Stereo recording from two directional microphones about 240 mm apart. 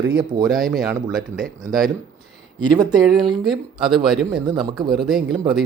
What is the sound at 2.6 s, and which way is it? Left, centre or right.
Speech, centre.